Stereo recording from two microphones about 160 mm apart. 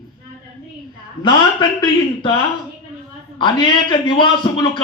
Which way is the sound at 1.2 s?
25° left (ahead or behind).